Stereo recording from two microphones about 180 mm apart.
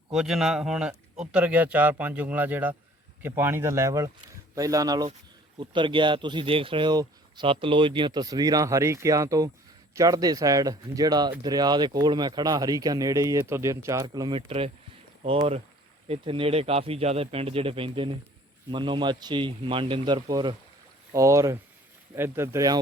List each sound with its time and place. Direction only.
0.1 s speech: centre (ahead or behind); by 22.8 s 20° right (ahead or behind)